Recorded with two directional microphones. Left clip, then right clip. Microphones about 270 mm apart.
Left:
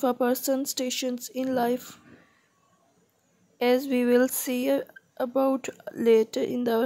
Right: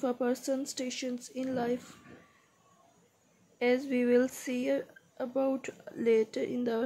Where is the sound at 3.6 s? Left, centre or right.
Left.